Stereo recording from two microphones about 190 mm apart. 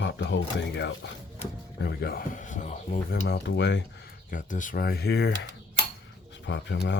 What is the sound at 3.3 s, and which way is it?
Speech, 65° left (ahead or behind).